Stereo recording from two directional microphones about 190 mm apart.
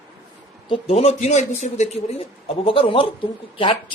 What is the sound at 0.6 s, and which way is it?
Speech, 30° left (ahead or behind).